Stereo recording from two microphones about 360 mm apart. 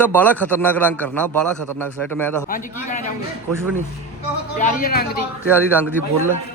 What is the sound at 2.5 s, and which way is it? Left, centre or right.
Speech, left.